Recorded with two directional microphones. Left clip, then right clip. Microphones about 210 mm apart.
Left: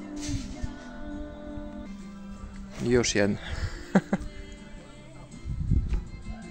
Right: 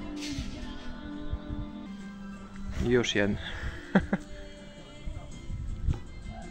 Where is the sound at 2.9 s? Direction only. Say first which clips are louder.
Left 2 dB; 10° left (ahead or behind).